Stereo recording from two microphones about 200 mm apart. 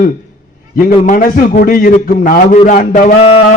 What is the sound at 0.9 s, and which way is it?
A man's voice, 40° left (ahead or behind).